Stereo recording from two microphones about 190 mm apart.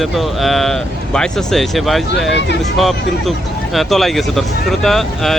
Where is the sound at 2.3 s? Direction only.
70° left (ahead or behind).